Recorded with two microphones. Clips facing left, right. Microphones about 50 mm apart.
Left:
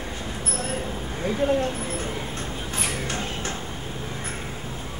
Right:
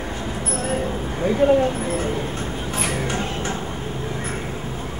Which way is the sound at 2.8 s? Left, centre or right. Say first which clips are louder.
Right 5 dB; centre.